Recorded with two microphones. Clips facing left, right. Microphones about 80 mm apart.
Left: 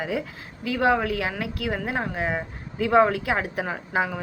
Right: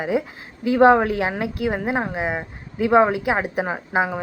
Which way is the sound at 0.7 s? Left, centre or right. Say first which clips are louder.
Right 8 dB; right.